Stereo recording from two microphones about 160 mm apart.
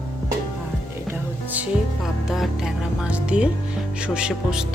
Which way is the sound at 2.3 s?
Centre (ahead or behind).